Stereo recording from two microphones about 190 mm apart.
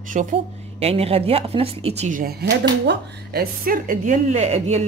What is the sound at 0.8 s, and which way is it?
Speech, 30° right (ahead or behind).